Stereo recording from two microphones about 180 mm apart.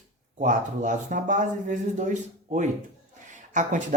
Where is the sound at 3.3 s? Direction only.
45° right (ahead or behind).